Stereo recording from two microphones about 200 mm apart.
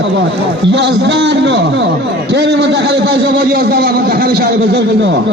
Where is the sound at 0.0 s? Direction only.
65° right (ahead or behind).